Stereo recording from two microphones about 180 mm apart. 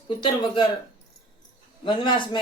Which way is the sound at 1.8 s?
25° left (ahead or behind).